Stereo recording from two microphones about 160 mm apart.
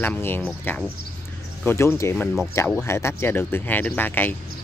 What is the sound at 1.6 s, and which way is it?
Speech, 15° left (ahead or behind).